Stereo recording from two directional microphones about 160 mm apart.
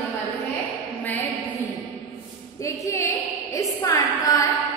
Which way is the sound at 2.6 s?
20° left (ahead or behind).